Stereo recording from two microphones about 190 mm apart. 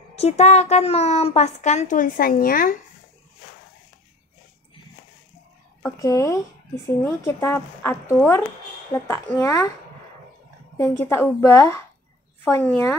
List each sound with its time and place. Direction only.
0.1 s a woman's voice: 35° left (ahead or behind)
5.8 s speech: 15° left (ahead or behind)
10.8 s speech: 15° left (ahead or behind)